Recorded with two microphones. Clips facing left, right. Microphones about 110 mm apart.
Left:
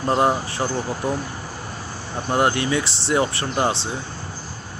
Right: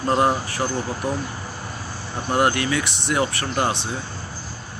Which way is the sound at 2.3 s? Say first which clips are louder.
Even; 25° left (ahead or behind).